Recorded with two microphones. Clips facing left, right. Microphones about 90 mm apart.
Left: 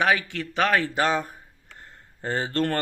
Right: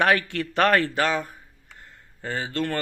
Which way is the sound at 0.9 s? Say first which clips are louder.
Left 1 dB; 25° left (ahead or behind).